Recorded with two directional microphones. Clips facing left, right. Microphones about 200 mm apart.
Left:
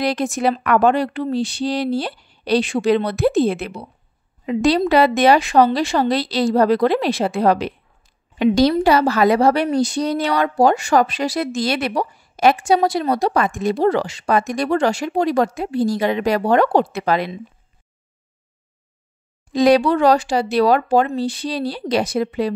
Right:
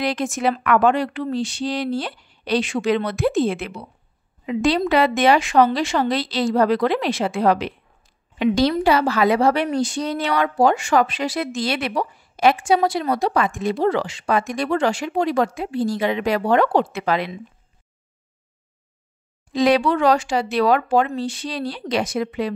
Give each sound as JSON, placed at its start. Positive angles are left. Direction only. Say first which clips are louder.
{"t": 0.0, "sound": "a woman's voice", "louder": "left 2 dB", "side_deg": 35}
{"t": 19.5, "sound": "a woman's voice", "louder": "left 3 dB", "side_deg": 40}